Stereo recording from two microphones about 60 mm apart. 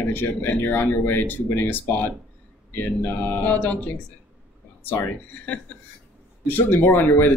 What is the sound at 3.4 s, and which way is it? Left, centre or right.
Speech, left.